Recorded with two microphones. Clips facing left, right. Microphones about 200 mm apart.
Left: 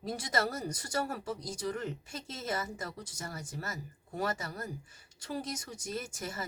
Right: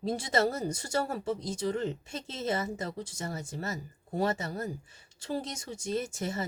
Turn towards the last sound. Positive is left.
turn(degrees=-25)  # may be behind; listen again after turning